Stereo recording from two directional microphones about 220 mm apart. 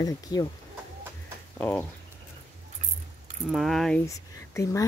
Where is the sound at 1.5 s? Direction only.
10° left (ahead or behind).